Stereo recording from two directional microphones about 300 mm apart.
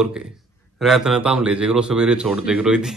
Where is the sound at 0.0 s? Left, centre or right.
Centre.